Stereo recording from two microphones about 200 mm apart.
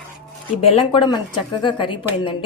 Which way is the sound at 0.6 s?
25° left (ahead or behind).